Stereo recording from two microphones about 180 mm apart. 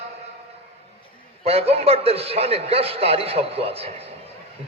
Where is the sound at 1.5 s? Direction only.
35° right (ahead or behind).